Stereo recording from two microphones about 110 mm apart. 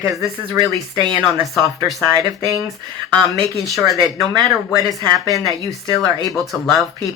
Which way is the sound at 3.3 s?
Centre (ahead or behind).